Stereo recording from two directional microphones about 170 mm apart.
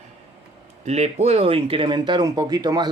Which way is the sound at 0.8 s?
40° right (ahead or behind).